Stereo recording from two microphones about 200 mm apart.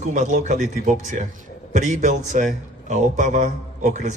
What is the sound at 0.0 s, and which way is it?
Speech, 35° right (ahead or behind).